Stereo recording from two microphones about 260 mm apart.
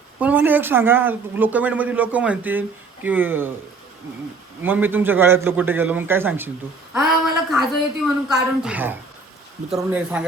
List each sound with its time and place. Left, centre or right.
0.2 s speech: centre
4.6 s a woman's voice: centre